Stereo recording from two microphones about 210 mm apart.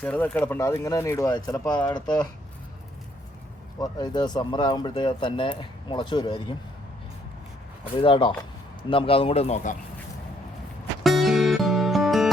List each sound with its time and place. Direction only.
0.0 s speech: 5° left (ahead or behind)
3.8 s speech: 20° left (ahead or behind)
7.9 s speech: 25° left (ahead or behind)
11.0 s music: centre (ahead or behind)